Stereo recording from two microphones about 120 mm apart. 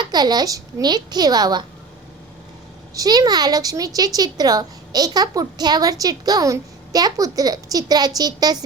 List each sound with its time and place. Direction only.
0.0 s a woman's voice: 35° right (ahead or behind)
2.9 s a woman's voice: 30° right (ahead or behind)